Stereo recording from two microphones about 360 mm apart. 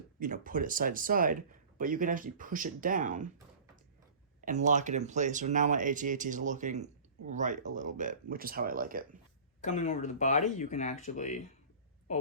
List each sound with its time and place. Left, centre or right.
0.2 s speech: right
4.4 s speech: right
9.6 s speech: centre